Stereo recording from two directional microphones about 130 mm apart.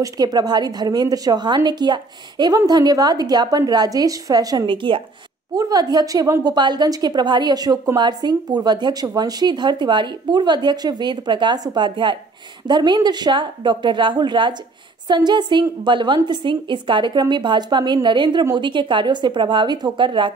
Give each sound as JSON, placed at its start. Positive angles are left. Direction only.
{"t": 0.0, "sound": "a woman's voice", "side_deg": -30}